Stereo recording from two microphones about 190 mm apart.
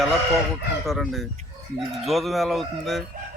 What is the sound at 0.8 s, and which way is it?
A man's voice, centre (ahead or behind).